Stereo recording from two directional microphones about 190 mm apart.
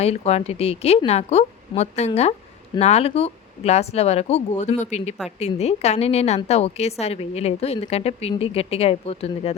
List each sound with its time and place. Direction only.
0.0 s a woman's voice: 35° left (ahead or behind)